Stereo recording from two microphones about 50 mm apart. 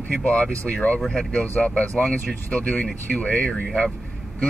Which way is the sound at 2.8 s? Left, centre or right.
Centre.